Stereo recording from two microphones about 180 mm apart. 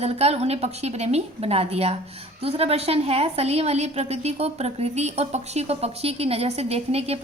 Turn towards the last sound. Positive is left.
turn(degrees=-35)  # may be behind; listen again after turning